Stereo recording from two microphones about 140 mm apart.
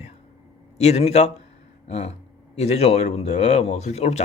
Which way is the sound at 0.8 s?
50° left (ahead or behind).